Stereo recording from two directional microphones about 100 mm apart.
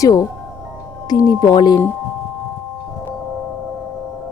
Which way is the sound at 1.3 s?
45° left (ahead or behind).